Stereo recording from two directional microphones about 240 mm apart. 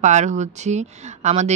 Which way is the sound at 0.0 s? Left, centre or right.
Right.